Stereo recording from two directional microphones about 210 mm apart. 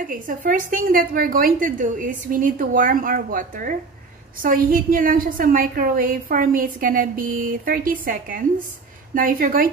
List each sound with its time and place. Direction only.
0.0 s a woman's voice: 40° right (ahead or behind)